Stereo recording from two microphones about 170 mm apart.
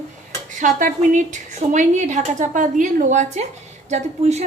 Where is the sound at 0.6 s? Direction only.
50° right (ahead or behind).